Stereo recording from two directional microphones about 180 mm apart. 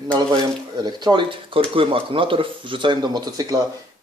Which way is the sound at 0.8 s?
25° right (ahead or behind).